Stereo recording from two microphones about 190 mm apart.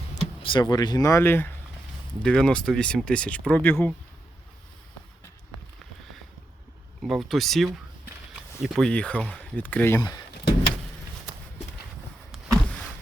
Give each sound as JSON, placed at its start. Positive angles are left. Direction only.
{"t": 0.4, "sound": "speech", "side_deg": 25}
{"t": 7.0, "sound": "speech", "side_deg": 0}
{"t": 12.6, "sound": "a sound", "side_deg": 5}